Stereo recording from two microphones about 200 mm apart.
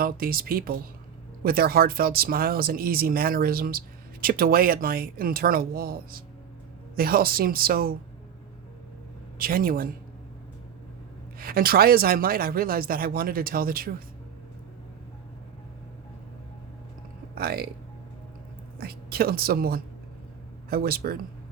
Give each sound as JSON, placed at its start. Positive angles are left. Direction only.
{"t": 0.0, "sound": "speech", "side_deg": -45}
{"t": 9.4, "sound": "speech", "side_deg": -45}
{"t": 11.3, "sound": "speech", "side_deg": -50}
{"t": 17.3, "sound": "speech", "side_deg": -50}
{"t": 18.8, "sound": "speech", "side_deg": -50}